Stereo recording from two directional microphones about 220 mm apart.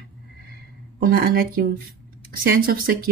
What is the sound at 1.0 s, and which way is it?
Speech, 40° right (ahead or behind).